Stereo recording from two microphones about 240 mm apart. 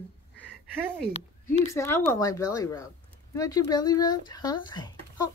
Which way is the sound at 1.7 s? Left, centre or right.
Centre.